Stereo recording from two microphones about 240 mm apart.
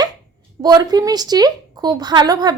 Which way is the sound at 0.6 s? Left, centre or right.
Centre.